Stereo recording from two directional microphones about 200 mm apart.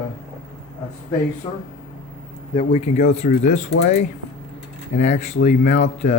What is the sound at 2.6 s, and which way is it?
Speech, 30° left (ahead or behind).